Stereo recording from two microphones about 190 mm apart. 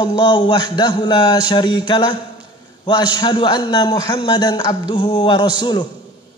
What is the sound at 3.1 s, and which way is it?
A man's voice, 25° left (ahead or behind).